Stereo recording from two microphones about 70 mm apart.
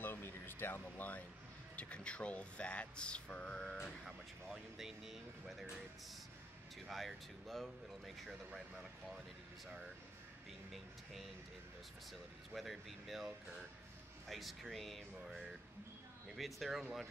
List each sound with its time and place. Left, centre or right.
0.0 s a sound: left
1.8 s speech: centre
4.0 s speech: centre
6.9 s speech: centre
12.1 s speech: centre